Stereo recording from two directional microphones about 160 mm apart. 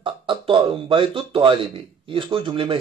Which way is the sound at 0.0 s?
30° right (ahead or behind).